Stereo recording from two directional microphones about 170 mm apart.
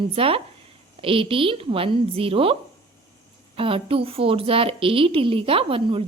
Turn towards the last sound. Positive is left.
turn(degrees=-35)  # may be behind; listen again after turning